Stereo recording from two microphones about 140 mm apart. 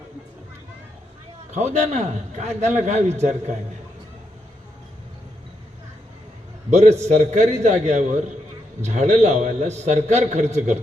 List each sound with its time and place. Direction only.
1.5 s a man's voice: 55° right (ahead or behind)
6.7 s a man's voice: 50° right (ahead or behind)